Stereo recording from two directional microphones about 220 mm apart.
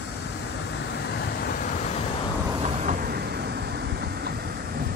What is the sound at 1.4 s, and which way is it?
Vehicle, 40° left (ahead or behind).